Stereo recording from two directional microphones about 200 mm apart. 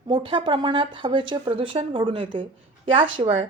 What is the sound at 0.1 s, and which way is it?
A woman's voice, 25° right (ahead or behind).